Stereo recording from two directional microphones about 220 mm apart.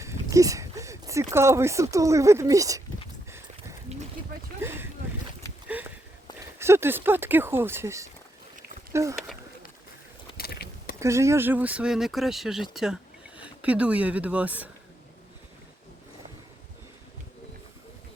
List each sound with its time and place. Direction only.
0.0 s speech: 15° right (ahead or behind)
3.9 s a sound: 30° right (ahead or behind)
4.6 s boat: 10° right (ahead or behind)
5.6 s a sound: 5° right (ahead or behind)
6.6 s speech: 10° right (ahead or behind)
10.3 s vehicle: 45° left (ahead or behind)
11.0 s speech: 15° right (ahead or behind)